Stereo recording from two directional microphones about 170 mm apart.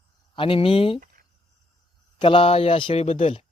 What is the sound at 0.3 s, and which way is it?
Speech, 30° left (ahead or behind).